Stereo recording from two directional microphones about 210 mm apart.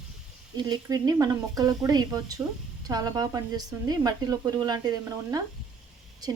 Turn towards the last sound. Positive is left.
turn(degrees=-15)  # may be behind; listen again after turning